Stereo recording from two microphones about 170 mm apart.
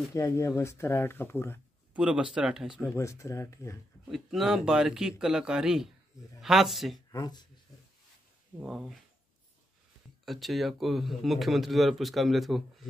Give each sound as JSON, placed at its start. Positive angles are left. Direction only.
{"t": 0.1, "sound": "speech", "side_deg": 20}
{"t": 2.0, "sound": "speech", "side_deg": -5}
{"t": 2.9, "sound": "speech", "side_deg": 15}
{"t": 4.1, "sound": "speech", "side_deg": 0}
{"t": 7.1, "sound": "speech", "side_deg": 25}
{"t": 8.5, "sound": "speech", "side_deg": 0}
{"t": 10.2, "sound": "speech", "side_deg": 0}